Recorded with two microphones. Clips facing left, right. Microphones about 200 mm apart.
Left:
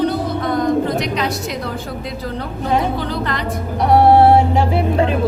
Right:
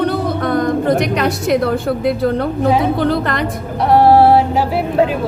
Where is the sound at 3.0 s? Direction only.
55° right (ahead or behind).